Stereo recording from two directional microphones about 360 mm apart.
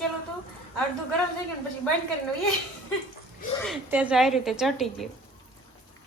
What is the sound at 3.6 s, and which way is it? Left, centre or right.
A woman's voice, centre.